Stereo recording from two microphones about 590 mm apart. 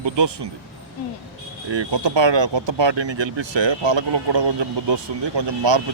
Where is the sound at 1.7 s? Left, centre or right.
Right.